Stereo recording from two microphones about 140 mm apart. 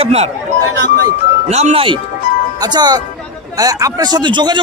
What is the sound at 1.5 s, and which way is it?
Speech, 50° right (ahead or behind).